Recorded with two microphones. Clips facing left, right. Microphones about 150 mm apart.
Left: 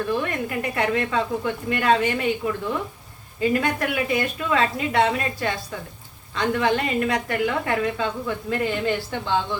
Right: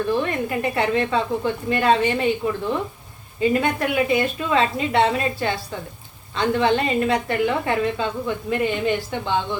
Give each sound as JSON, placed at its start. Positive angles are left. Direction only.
{"t": 0.1, "sound": "a woman's voice", "side_deg": -25}
{"t": 3.4, "sound": "a woman's voice", "side_deg": -25}